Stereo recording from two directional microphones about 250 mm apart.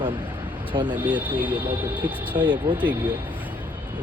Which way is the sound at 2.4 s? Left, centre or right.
Centre.